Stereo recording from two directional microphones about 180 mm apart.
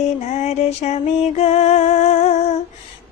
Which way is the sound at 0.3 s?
40° left (ahead or behind).